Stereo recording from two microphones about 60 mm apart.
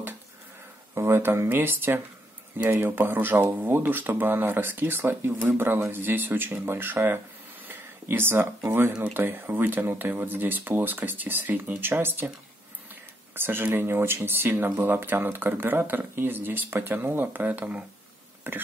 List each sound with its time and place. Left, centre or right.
0.9 s speech: right
7.6 s a sound: right
9.1 s speech: right
13.3 s speech: right
18.4 s speech: right